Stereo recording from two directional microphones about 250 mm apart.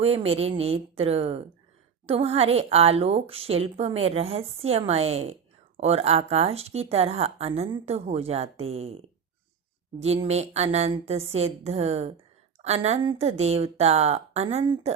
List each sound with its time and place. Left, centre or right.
0.0 s a woman's voice: right